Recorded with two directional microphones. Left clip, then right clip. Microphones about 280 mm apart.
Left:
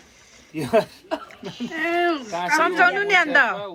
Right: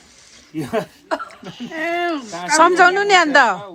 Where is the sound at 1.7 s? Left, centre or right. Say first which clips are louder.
Right 1 dB; right.